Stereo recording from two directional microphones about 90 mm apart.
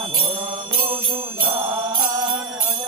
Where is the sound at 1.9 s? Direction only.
50° right (ahead or behind).